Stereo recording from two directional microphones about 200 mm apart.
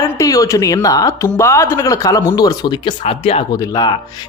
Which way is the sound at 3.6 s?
20° left (ahead or behind).